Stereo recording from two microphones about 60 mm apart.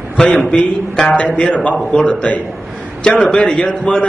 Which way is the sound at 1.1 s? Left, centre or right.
Left.